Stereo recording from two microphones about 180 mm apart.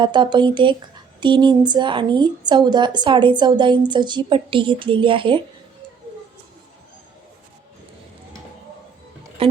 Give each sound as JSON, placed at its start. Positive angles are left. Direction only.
{"t": 0.0, "sound": "a woman's voice", "side_deg": -25}
{"t": 9.4, "sound": "music", "side_deg": -30}